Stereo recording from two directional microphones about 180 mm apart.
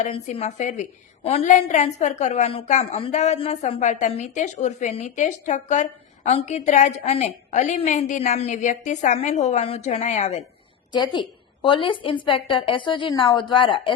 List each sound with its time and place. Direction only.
0.0 s a woman's voice: 35° left (ahead or behind)
11.0 s a woman's voice: 25° left (ahead or behind)